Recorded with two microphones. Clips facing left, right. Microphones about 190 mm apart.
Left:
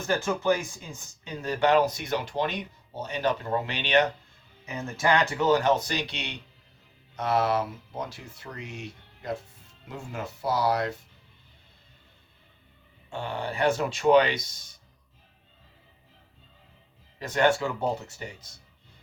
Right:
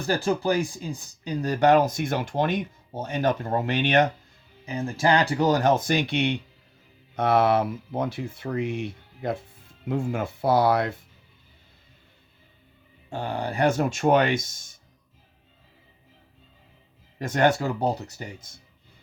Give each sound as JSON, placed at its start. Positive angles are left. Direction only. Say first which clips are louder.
{"t": 0.0, "sound": "speech", "louder": "right 2 dB", "side_deg": -35}
{"t": 4.6, "sound": "speech", "louder": "right 3 dB", "side_deg": -30}
{"t": 13.1, "sound": "speech", "louder": "right 3 dB", "side_deg": -40}
{"t": 17.2, "sound": "speech", "louder": "right 2 dB", "side_deg": -45}